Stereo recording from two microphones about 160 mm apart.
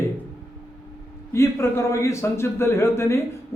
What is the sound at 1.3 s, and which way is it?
A man's voice, 15° left (ahead or behind).